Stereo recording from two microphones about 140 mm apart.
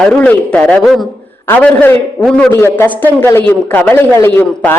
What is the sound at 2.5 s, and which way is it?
A man's voice, 20° left (ahead or behind).